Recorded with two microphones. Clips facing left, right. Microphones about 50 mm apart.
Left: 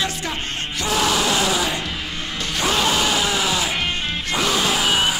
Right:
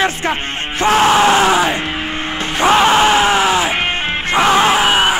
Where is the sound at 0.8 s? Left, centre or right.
Right.